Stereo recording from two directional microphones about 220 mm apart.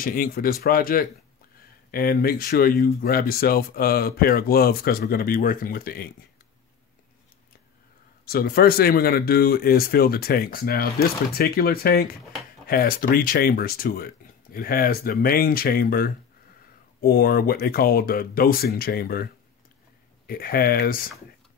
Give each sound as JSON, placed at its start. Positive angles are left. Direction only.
{"t": 0.0, "sound": "speech", "side_deg": 40}
{"t": 8.3, "sound": "speech", "side_deg": 45}
{"t": 20.2, "sound": "speech", "side_deg": 40}